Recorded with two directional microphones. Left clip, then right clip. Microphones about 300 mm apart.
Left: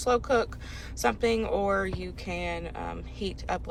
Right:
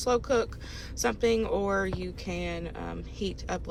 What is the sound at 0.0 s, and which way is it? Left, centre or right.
Speech, centre.